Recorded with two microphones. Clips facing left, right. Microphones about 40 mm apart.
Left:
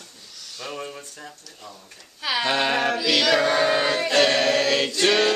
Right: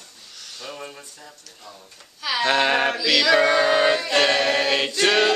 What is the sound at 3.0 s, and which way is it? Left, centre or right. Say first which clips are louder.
Chant: right 3 dB; right.